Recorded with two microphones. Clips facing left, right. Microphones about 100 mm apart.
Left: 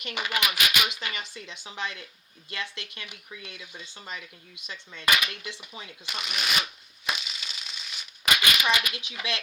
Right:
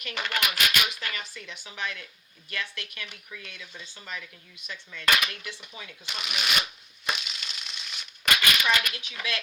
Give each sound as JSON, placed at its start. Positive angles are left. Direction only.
{"t": 0.0, "sound": "speech", "side_deg": 20}
{"t": 0.9, "sound": "speech", "side_deg": 20}
{"t": 6.1, "sound": "speech", "side_deg": 0}
{"t": 7.0, "sound": "crushing", "side_deg": 0}
{"t": 8.4, "sound": "a sound", "side_deg": 15}
{"t": 8.9, "sound": "speech", "side_deg": 20}